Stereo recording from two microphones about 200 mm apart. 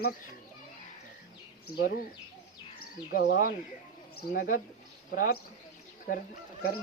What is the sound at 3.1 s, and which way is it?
Speech, 45° left (ahead or behind).